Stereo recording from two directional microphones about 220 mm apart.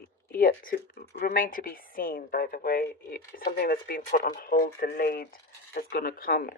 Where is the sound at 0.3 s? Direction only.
40° left (ahead or behind).